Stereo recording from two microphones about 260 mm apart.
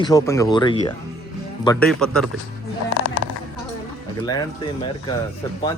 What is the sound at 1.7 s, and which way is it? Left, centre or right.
Speech, centre.